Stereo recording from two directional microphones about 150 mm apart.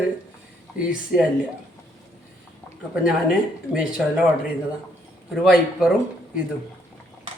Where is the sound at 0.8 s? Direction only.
5° right (ahead or behind).